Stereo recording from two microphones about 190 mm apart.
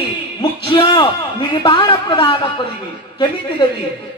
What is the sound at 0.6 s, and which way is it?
A man's voice, 25° left (ahead or behind).